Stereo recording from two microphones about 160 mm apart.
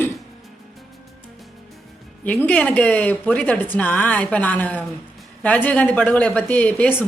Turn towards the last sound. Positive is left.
turn(degrees=10)  # may be behind; listen again after turning